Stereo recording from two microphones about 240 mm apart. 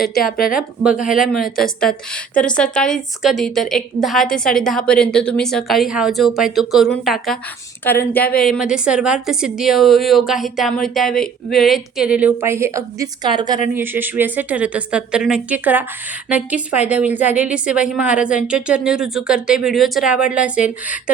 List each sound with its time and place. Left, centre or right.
0.2 s speech: left
0.5 s a woman's voice: centre